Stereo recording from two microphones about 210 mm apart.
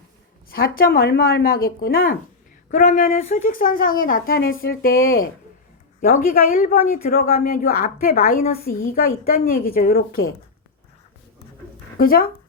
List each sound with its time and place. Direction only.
0.5 s speech: 45° left (ahead or behind)
11.9 s speech: 45° left (ahead or behind)